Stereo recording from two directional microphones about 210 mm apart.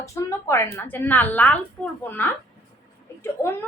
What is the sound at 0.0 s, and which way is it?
A woman's voice, 15° left (ahead or behind).